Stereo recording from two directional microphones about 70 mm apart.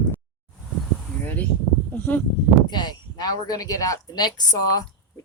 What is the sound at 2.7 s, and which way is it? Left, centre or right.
Speech, left.